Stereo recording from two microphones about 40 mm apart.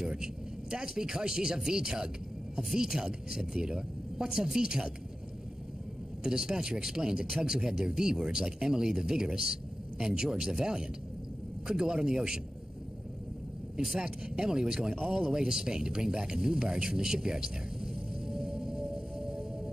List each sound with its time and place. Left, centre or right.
0.0 s speech: centre
6.2 s speech: centre
13.9 s speech: right
15.0 s a sound: centre